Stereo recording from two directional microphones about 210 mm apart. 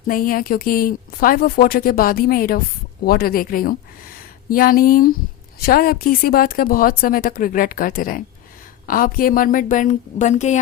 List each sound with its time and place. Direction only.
0.1 s a woman's voice: 40° left (ahead or behind)